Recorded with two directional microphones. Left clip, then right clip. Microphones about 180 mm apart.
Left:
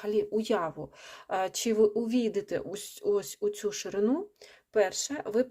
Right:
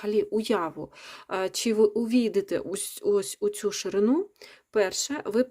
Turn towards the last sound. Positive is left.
turn(degrees=-40)  # may be behind; listen again after turning